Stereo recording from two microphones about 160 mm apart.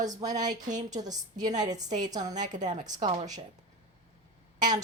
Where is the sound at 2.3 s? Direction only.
50° right (ahead or behind).